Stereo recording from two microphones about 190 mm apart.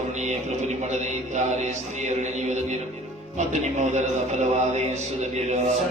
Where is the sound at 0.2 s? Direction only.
40° right (ahead or behind).